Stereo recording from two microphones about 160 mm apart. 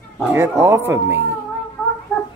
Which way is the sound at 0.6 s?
15° right (ahead or behind).